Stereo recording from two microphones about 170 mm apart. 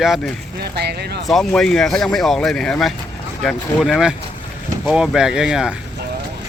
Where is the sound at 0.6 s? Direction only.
75° right (ahead or behind).